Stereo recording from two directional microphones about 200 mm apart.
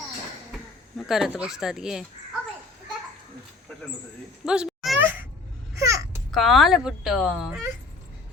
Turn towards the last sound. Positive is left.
turn(degrees=-5)  # may be behind; listen again after turning